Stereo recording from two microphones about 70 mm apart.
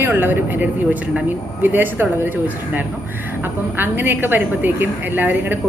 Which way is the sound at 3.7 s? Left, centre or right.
Right.